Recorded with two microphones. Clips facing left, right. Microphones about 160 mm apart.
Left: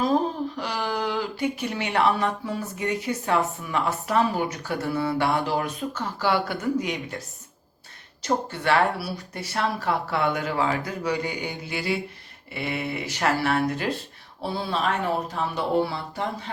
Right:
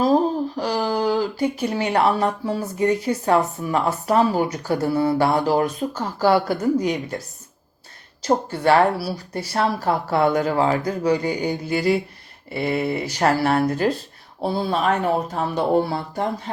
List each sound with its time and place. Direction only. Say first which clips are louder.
0.0 s speech: right 5 dB; 35° right (ahead or behind)
8.2 s speech: right 6 dB; 35° right (ahead or behind)